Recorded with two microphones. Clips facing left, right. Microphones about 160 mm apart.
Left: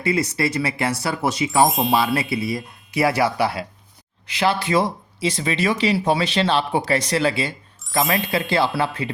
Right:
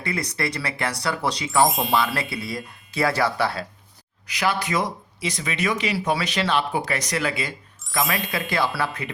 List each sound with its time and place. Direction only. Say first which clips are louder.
0.0 s speech: left 6 dB; 25° left (ahead or behind)
1.6 s ding: left 2 dB; centre (ahead or behind)
2.1 s speech: left 5 dB; 20° left (ahead or behind)